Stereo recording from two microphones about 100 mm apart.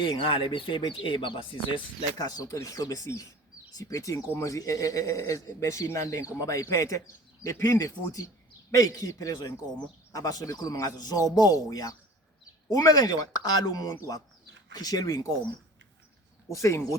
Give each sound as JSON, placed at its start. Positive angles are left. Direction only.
{"t": 0.0, "sound": "speech", "side_deg": 65}
{"t": 2.1, "sound": "speech", "side_deg": 40}
{"t": 16.5, "sound": "speech", "side_deg": 30}